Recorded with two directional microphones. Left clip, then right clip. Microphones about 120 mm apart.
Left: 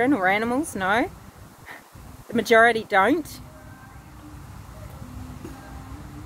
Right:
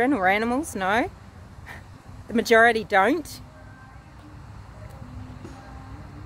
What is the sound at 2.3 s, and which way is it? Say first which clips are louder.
Speech: even; 55° right (ahead or behind).